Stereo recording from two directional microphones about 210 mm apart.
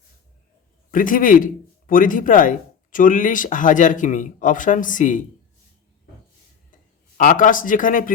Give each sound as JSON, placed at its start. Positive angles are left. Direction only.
{"t": 0.9, "sound": "a man's voice", "side_deg": 40}
{"t": 7.2, "sound": "speech", "side_deg": 40}